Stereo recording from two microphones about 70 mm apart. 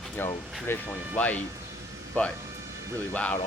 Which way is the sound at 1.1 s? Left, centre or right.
Left.